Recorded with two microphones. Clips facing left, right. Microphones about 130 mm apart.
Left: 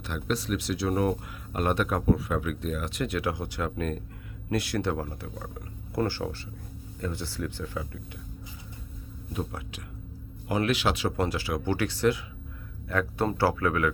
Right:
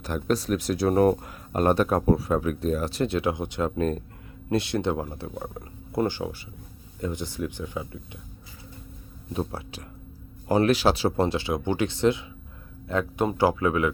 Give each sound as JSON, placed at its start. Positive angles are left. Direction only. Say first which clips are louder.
{"t": 0.0, "sound": "speech", "louder": "right 5 dB", "side_deg": -40}
{"t": 9.3, "sound": "speech", "louder": "right 4 dB", "side_deg": -30}